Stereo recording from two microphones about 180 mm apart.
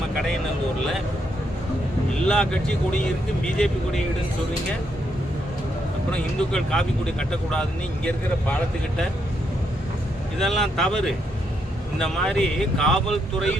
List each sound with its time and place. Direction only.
2.2 s speech: 5° left (ahead or behind)
6.1 s speech: 5° left (ahead or behind)
10.3 s speech: centre (ahead or behind)